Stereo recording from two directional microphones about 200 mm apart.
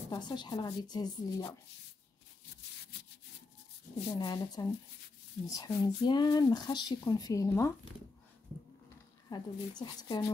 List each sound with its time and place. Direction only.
0.1 s speech: 20° left (ahead or behind)
2.9 s wood: 60° left (ahead or behind)
4.1 s speech: 20° left (ahead or behind)
9.3 s speech: 20° left (ahead or behind)